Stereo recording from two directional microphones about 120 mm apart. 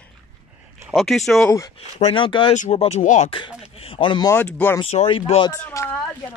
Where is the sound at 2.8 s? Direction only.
75° left (ahead or behind).